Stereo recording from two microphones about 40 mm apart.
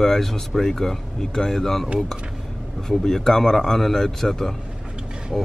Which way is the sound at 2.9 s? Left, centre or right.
Centre.